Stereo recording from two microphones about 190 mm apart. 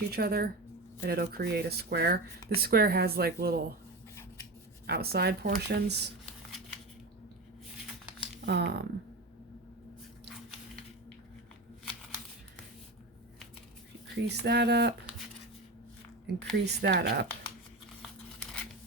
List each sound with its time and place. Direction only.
0.1 s speech: 55° right (ahead or behind)
4.1 s rub: 15° left (ahead or behind)
4.9 s speech: 55° right (ahead or behind)
8.4 s speech: 65° right (ahead or behind)
14.3 s speech: 60° right (ahead or behind)
16.2 s speech: 60° right (ahead or behind)